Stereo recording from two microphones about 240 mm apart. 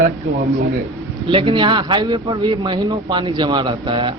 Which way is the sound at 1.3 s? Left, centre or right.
Right.